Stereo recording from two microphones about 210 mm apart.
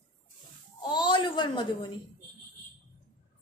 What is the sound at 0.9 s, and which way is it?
Speech, 20° left (ahead or behind).